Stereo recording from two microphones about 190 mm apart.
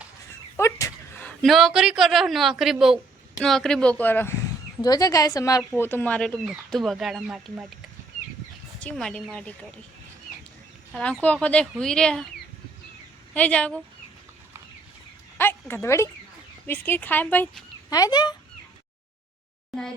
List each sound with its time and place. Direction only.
0.5 s speech: 15° left (ahead or behind); by 7.7 s 5° right (ahead or behind)
8.8 s speech: 5° left (ahead or behind)
10.9 s speech: 5° left (ahead or behind)
13.3 s speech: 5° left (ahead or behind)
15.4 s speech: 10° left (ahead or behind)